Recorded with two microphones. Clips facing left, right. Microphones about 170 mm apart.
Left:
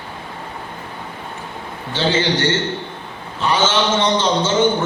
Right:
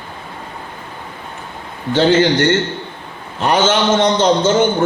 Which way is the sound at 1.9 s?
55° right (ahead or behind).